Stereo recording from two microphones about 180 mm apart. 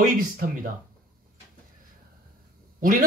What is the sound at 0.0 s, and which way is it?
Speech, 50° right (ahead or behind).